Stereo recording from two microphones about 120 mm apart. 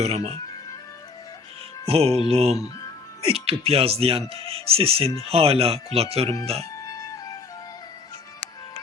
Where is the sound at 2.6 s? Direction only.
25° left (ahead or behind).